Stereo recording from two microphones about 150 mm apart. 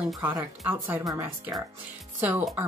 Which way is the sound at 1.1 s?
15° right (ahead or behind).